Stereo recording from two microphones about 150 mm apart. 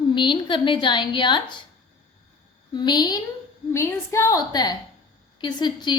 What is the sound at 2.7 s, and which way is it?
A woman's voice, 30° left (ahead or behind).